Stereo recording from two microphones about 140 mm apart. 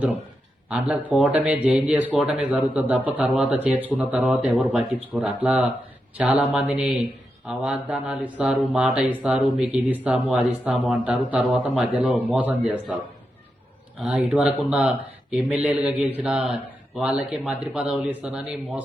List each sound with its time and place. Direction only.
0.7 s speech: 10° right (ahead or behind)
14.0 s speech: 10° right (ahead or behind)